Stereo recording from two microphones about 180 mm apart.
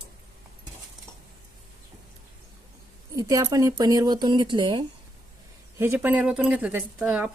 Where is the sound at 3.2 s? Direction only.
20° right (ahead or behind).